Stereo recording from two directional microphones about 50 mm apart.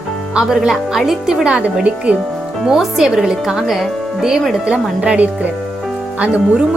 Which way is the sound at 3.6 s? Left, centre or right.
Centre.